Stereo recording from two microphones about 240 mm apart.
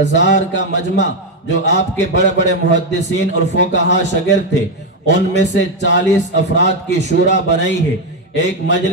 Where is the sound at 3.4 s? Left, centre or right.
Left.